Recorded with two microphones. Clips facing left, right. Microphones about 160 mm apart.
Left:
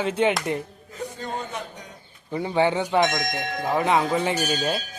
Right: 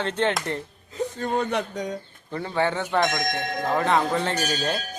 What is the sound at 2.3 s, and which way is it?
Speech, 15° left (ahead or behind).